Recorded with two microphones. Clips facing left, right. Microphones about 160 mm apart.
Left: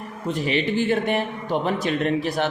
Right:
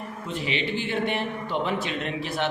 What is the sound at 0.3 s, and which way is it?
A man's voice, 45° left (ahead or behind).